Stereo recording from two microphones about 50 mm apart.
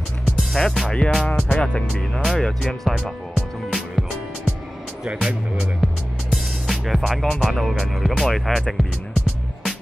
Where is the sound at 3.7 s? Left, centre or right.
Centre.